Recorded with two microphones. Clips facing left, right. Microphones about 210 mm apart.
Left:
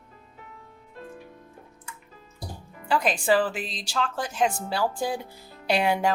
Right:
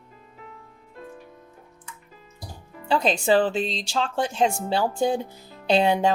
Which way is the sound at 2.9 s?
25° right (ahead or behind).